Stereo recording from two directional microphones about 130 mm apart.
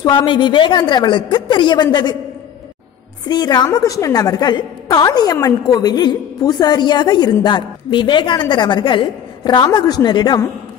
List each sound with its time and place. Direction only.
0.0 s a woman's voice: 35° left (ahead or behind)
3.3 s a woman's voice: 30° left (ahead or behind)